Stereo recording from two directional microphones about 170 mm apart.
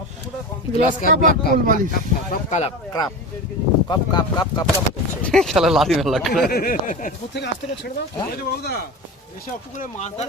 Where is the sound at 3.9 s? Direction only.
25° left (ahead or behind).